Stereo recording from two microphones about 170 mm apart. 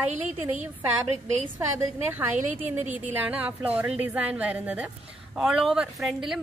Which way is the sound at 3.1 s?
10° right (ahead or behind).